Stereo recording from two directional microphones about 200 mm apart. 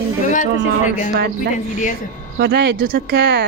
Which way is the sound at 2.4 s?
60° right (ahead or behind).